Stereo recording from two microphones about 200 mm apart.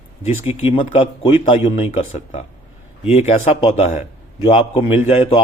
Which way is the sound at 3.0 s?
30° left (ahead or behind).